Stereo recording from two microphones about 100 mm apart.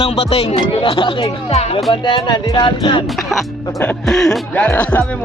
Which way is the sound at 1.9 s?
55° left (ahead or behind).